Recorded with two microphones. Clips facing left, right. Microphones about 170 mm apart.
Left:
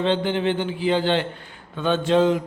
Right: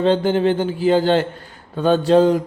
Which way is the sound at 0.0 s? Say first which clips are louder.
Right 5 dB; 40° right (ahead or behind).